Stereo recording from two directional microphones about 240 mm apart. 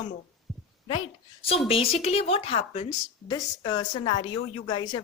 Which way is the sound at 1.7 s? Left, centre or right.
Left.